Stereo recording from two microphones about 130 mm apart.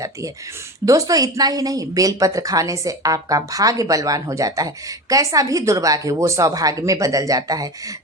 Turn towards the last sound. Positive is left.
turn(degrees=-30)  # may be behind; listen again after turning